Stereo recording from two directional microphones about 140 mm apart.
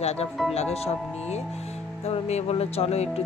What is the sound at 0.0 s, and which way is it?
Speech, 50° left (ahead or behind).